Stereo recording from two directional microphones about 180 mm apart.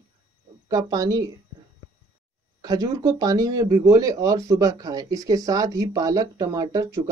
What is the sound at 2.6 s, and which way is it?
Speech, 20° right (ahead or behind).